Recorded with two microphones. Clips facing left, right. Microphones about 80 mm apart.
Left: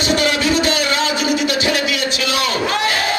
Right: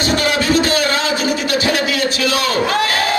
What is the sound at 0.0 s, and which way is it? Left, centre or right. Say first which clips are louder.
Music: even; right.